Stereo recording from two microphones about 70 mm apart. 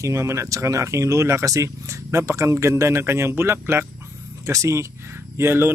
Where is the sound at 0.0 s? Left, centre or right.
Right.